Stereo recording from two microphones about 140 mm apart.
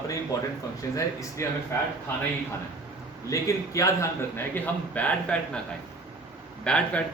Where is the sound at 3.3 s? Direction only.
25° left (ahead or behind).